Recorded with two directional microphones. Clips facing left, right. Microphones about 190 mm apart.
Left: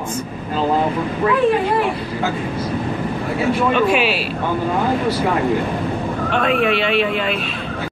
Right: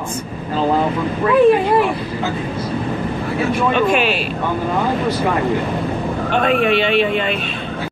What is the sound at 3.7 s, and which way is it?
Speech, 5° left (ahead or behind).